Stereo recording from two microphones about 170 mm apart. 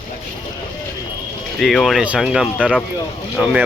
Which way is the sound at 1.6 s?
Centre (ahead or behind).